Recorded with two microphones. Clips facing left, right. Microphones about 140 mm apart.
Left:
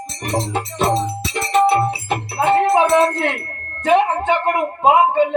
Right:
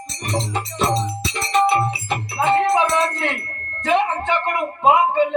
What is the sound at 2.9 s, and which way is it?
Music, 55° left (ahead or behind).